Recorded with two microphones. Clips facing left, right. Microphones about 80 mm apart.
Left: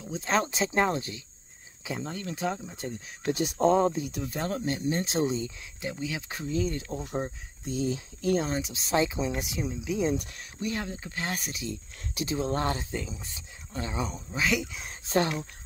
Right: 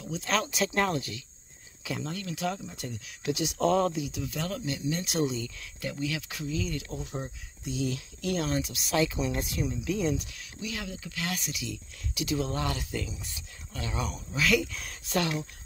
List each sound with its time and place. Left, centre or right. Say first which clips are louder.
0.0 s speech: left 2 dB; left
3.3 s speech: left 2 dB; left
3.5 s speech: left 3 dB; left
3.9 s speech: left 1 dB; left
10.1 s speech: left 3 dB; left